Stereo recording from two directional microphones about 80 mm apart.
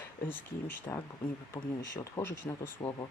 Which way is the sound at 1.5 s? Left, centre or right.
Left.